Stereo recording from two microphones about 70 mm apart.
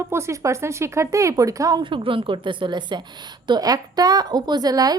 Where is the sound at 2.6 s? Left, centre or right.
Right.